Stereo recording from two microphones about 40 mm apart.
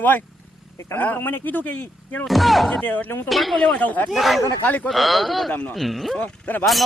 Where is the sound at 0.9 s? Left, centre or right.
Left.